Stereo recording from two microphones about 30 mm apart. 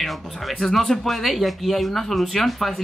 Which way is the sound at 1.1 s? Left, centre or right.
Centre.